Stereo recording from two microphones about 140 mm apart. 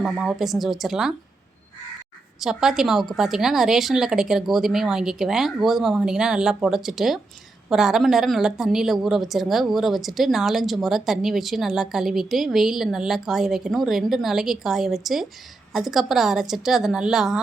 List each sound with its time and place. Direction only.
0.0 s speech: 5° right (ahead or behind)
2.4 s speech: 5° right (ahead or behind)